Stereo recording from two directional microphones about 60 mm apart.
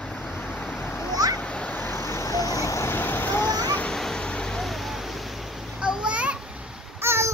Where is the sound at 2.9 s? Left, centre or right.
Left.